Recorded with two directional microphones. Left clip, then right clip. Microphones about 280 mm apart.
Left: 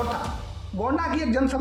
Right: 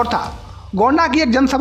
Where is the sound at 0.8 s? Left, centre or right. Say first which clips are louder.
Right 11 dB; right.